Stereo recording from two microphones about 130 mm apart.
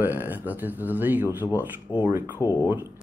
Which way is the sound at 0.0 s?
15° right (ahead or behind).